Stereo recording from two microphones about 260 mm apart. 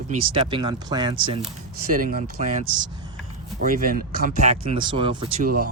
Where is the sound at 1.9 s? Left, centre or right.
Right.